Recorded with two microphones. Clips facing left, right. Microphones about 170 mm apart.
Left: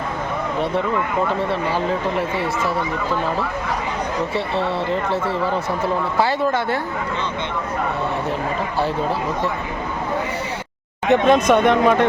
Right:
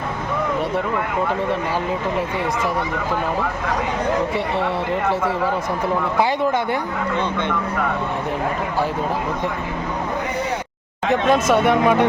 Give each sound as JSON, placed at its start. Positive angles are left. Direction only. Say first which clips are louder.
{"t": 6.1, "sound": "speech", "louder": "even", "side_deg": -15}
{"t": 11.1, "sound": "speech", "louder": "left 2 dB", "side_deg": -5}